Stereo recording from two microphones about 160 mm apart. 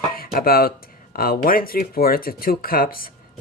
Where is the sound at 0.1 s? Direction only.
65° left (ahead or behind).